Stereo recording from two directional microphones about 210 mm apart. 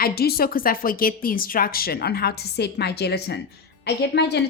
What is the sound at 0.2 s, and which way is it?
Speech, 45° left (ahead or behind).